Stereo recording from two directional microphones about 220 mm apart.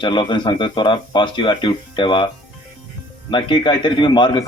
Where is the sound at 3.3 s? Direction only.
20° left (ahead or behind).